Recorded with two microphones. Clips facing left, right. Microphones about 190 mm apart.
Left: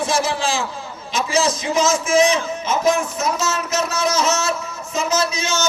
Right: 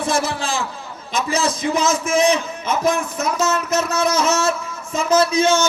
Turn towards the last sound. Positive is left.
turn(degrees=-55)  # may be behind; listen again after turning